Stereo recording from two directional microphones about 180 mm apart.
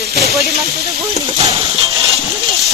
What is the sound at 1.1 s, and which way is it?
Speech, 35° right (ahead or behind).